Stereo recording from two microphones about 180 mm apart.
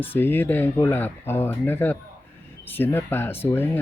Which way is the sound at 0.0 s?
10° left (ahead or behind).